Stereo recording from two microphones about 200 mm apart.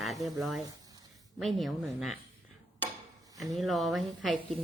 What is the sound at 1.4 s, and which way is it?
Speech, centre (ahead or behind).